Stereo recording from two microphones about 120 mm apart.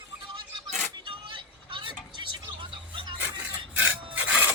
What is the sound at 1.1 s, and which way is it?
Vehicle, 45° right (ahead or behind).